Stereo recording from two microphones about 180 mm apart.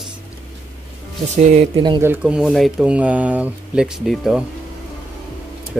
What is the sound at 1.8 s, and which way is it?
Speech, 25° right (ahead or behind).